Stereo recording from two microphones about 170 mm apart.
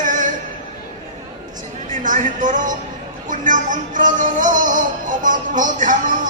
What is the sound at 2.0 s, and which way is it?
Speech, 50° right (ahead or behind).